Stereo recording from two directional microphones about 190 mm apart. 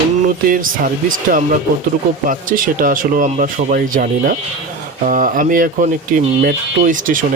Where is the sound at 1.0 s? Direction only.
45° right (ahead or behind).